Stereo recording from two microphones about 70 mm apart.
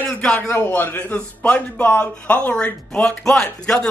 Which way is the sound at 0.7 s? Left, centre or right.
Left.